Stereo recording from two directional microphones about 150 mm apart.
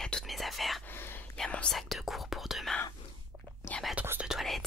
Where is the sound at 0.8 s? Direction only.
15° left (ahead or behind).